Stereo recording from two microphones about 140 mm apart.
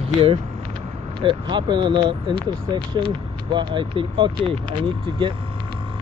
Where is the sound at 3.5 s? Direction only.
35° right (ahead or behind).